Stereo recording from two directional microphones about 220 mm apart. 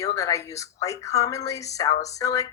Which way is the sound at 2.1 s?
15° left (ahead or behind).